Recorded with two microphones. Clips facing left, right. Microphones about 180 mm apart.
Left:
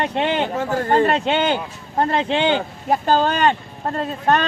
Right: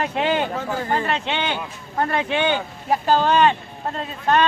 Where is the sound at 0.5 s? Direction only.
55° left (ahead or behind).